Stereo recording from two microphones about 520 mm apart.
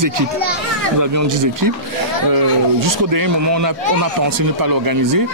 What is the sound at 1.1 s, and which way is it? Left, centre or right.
Speech, right.